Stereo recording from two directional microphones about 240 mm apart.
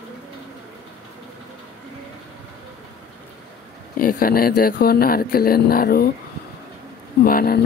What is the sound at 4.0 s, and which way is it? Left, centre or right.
Speech, left.